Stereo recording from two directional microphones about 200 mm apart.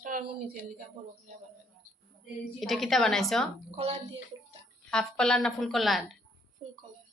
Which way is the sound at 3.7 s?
30° right (ahead or behind).